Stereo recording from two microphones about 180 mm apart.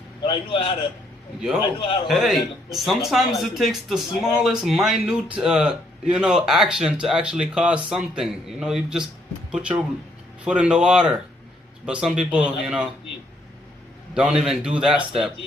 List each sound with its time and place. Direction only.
0.2 s a man's voice: 30° left (ahead or behind)
2.0 s speech: centre (ahead or behind)
14.1 s speech: 5° right (ahead or behind)